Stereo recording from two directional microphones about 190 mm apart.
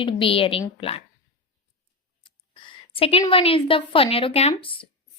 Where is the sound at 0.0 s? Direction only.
30° left (ahead or behind).